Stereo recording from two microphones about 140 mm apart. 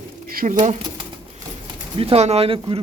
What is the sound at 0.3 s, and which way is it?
Pigeon, 90° right.